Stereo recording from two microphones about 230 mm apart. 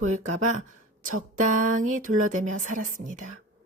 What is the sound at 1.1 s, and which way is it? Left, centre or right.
Speech, right.